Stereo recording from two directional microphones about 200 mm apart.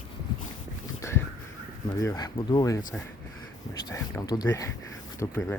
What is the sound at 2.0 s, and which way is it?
Speech, 20° left (ahead or behind).